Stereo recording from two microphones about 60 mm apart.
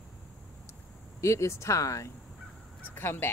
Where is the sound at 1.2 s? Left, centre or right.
Left.